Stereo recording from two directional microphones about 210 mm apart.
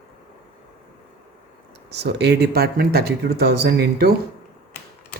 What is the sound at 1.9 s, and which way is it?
Speech, 55° right (ahead or behind).